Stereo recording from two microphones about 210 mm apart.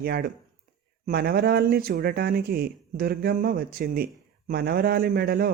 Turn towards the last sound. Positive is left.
turn(degrees=-45)  # may be behind; listen again after turning